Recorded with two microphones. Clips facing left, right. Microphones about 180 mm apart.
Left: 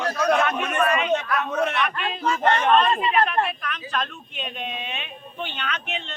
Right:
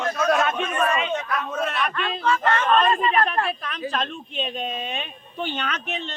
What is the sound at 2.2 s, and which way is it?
Speech, 40° left (ahead or behind).